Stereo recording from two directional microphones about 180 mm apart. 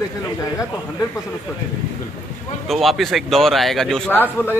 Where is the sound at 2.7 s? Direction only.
Centre (ahead or behind).